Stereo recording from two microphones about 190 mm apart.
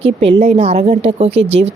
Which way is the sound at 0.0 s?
30° right (ahead or behind).